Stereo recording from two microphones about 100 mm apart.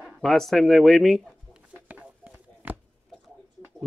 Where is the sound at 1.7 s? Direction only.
15° right (ahead or behind).